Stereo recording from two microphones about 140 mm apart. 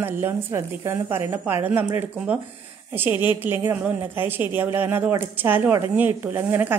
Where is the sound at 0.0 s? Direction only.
20° right (ahead or behind).